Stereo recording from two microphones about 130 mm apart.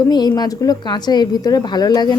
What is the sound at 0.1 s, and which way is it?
A woman's voice, 30° left (ahead or behind).